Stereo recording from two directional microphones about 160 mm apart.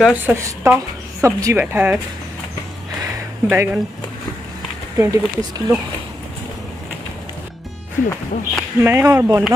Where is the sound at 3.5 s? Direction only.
10° right (ahead or behind).